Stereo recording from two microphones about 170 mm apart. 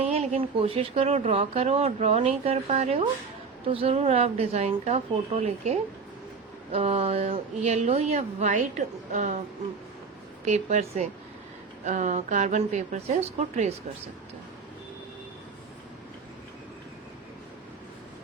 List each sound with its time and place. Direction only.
0.0 s speech: 40° right (ahead or behind)
10.4 s speech: 40° right (ahead or behind)